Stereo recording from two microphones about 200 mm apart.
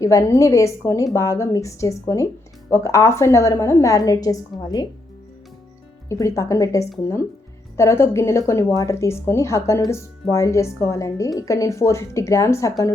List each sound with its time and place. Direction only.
0.0 s a woman's voice: 15° left (ahead or behind)
6.1 s a woman's voice: 15° left (ahead or behind)